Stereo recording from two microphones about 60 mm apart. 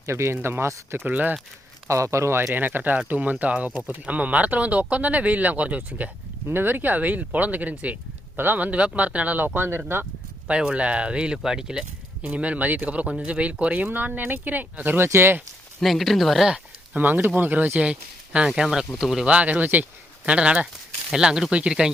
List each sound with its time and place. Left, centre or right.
0.0 s speech: right
1.0 s speech: right
1.9 s speech: right
2.5 s speech: right
6.5 s speech: right
9.6 s speech: right
10.5 s speech: centre
12.2 s speech: right
15.8 s speech: centre
17.0 s speech: right
18.3 s speech: centre
19.2 s speech: right
20.2 s speech: centre